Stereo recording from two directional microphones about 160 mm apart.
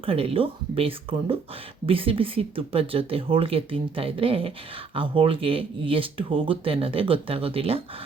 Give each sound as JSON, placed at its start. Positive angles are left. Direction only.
{"t": 0.0, "sound": "speech", "side_deg": -35}